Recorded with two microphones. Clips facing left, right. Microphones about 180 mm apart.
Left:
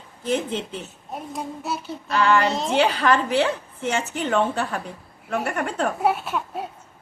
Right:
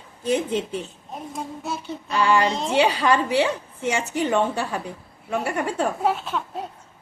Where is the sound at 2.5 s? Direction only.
5° left (ahead or behind).